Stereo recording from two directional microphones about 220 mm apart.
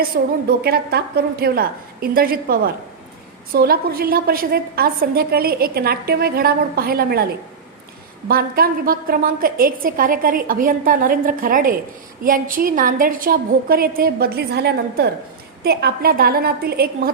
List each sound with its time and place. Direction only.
0.1 s a woman's voice: 40° right (ahead or behind)
8.3 s a woman's voice: 40° right (ahead or behind)